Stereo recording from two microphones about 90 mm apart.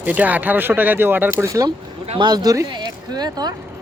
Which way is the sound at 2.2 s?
50° right (ahead or behind).